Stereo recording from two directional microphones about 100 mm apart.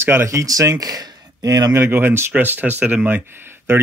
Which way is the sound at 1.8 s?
20° right (ahead or behind).